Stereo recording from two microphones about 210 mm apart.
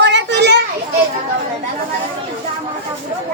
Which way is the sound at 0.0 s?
55° right (ahead or behind).